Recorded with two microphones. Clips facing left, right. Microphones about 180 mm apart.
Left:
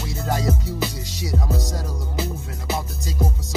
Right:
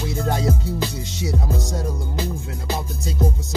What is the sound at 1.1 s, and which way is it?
Music, 25° right (ahead or behind).